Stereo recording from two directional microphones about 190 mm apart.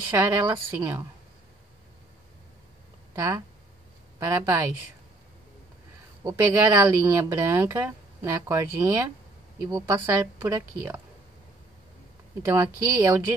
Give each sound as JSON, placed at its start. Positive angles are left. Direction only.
{"t": 0.1, "sound": "speech", "side_deg": -10}
{"t": 3.2, "sound": "speech", "side_deg": -15}
{"t": 6.2, "sound": "speech", "side_deg": -15}
{"t": 12.4, "sound": "speech", "side_deg": -15}